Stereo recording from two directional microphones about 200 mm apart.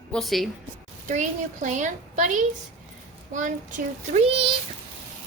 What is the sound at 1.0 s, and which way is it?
A woman's voice, 40° right (ahead or behind).